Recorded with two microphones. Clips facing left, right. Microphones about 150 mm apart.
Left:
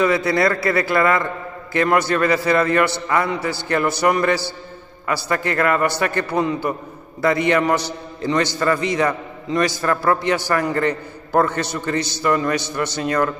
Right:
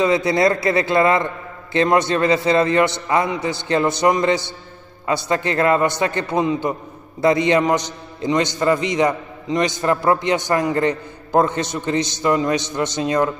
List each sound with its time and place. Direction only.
0.0 s a man's voice: 20° right (ahead or behind)